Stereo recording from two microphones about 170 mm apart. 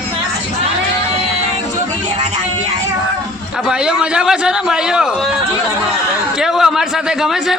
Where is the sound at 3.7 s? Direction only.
5° right (ahead or behind).